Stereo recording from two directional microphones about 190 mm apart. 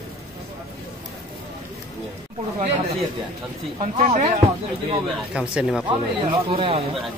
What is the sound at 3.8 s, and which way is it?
Speech, 40° right (ahead or behind).